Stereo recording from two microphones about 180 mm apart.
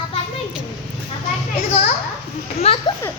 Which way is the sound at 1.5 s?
35° left (ahead or behind).